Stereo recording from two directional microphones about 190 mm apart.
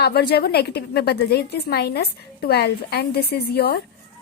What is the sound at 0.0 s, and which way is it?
A woman's voice, 55° left (ahead or behind).